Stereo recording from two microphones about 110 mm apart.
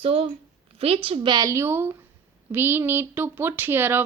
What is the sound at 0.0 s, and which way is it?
Speech, 60° right (ahead or behind).